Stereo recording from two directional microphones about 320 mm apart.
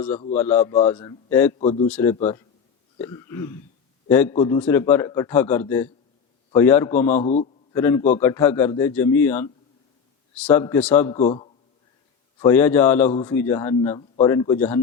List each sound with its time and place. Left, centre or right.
0.3 s a man's voice: centre
1.5 s a man's voice: centre
1.9 s a man's voice: centre
7.2 s a man's voice: left
7.7 s a man's voice: centre
11.2 s a man's voice: centre
12.4 s a man's voice: centre